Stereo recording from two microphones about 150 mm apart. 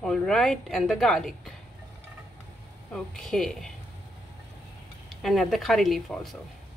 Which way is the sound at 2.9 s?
5° left (ahead or behind).